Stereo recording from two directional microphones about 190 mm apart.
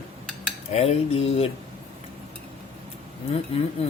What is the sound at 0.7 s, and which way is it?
Speech, 35° left (ahead or behind).